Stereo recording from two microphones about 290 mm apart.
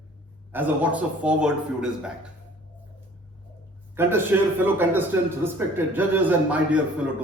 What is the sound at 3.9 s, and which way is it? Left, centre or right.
A man's voice, centre.